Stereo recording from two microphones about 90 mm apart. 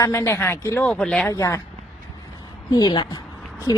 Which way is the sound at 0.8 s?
10° left (ahead or behind).